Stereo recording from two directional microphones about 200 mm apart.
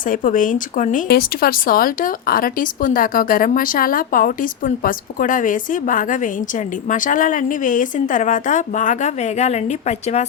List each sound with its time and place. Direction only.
0.1 s a woman's voice: 40° left (ahead or behind)